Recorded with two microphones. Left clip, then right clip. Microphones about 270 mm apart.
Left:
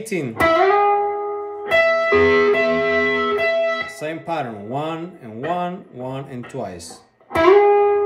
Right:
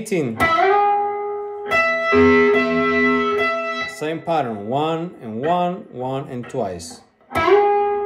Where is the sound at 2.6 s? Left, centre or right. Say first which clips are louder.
Even; centre.